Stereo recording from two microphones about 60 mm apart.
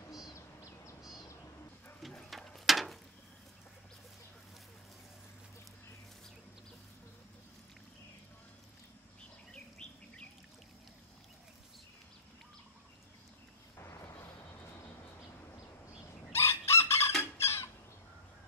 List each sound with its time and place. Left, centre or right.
0.3 s owl: left
2.0 s a sound: centre
9.5 s bird: centre
16.3 s chicken: left
17.2 s rodents: left